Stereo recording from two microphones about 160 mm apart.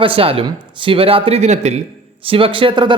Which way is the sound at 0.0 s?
35° right (ahead or behind).